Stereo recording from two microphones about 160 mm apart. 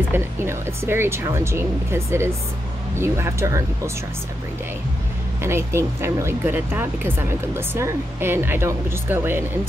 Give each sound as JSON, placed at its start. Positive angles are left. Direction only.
{"t": 0.1, "sound": "speech", "side_deg": -15}
{"t": 5.4, "sound": "speech", "side_deg": -15}